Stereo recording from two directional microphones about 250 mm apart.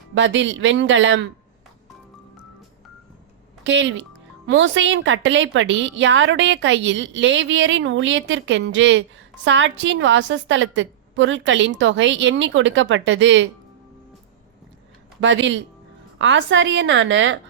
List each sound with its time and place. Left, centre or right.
0.1 s a woman's voice: right
3.6 s a woman's voice: right
15.2 s a woman's voice: right